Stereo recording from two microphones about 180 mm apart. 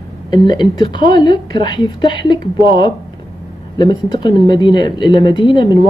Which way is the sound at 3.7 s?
25° left (ahead or behind).